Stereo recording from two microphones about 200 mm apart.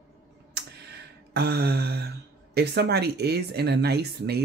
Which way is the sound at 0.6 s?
55° right (ahead or behind).